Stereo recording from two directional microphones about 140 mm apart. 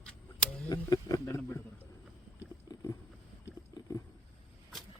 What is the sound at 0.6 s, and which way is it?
Speech, 25° left (ahead or behind).